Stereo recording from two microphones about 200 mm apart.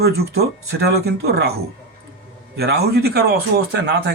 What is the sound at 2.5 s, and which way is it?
Speech, 55° right (ahead or behind).